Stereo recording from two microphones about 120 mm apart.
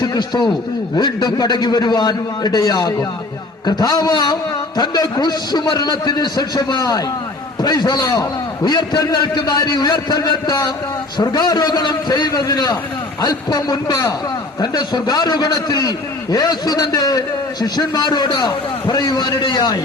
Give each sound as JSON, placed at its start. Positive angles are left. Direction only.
{"t": 0.0, "sound": "a man's voice", "side_deg": 35}